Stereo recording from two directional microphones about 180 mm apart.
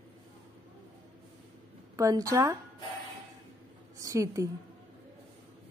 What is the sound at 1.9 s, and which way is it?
Speech, 20° right (ahead or behind).